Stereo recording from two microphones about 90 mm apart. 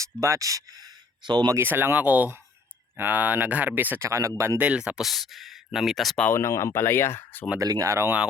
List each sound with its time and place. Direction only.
0.0 s speech: 35° right (ahead or behind); by 1.5 s 55° right (ahead or behind)
1.5 s speech: 25° right (ahead or behind)
4.0 s speech: 35° right (ahead or behind)
4.6 s speech: 15° right (ahead or behind)
6.3 s speech: 35° left (ahead or behind)
7.6 s speech: 40° right (ahead or behind)